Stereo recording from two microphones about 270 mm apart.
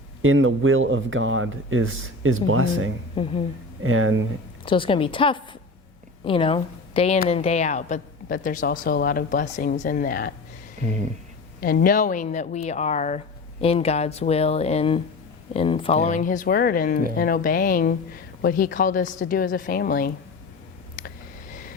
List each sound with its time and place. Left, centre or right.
0.2 s speech: right
3.2 s a woman's voice: left
3.8 s speech: right
4.6 s a woman's voice: centre
10.8 s a sound: right
11.6 s a woman's voice: left